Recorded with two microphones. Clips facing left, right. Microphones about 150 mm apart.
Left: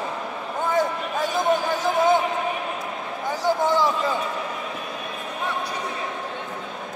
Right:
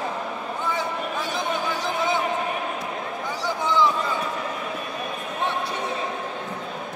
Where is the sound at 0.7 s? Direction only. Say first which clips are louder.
Left 5 dB; 45° left (ahead or behind).